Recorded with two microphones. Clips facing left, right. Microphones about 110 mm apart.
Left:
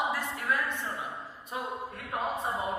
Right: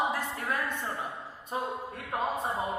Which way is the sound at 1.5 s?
30° right (ahead or behind).